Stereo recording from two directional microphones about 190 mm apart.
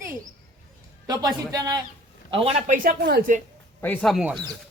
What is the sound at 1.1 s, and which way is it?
Speech, 20° right (ahead or behind).